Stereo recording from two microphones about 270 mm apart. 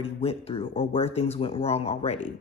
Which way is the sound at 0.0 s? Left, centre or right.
Left.